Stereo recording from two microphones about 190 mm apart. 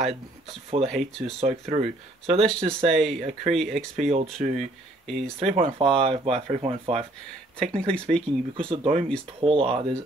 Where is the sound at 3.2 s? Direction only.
35° right (ahead or behind).